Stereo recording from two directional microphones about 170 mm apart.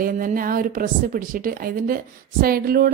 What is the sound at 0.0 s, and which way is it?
A woman's voice, 50° right (ahead or behind).